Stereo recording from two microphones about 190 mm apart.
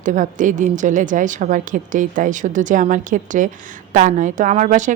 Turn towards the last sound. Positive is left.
turn(degrees=-40)  # may be behind; listen again after turning